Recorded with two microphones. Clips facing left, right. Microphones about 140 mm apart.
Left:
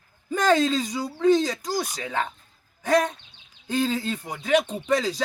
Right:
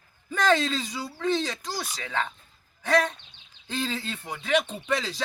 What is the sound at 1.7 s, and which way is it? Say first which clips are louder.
Speech: left 7 dB; 45° left (ahead or behind).